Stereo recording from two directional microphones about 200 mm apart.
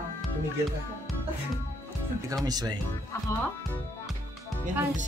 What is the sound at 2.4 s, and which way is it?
Speech, 20° right (ahead or behind).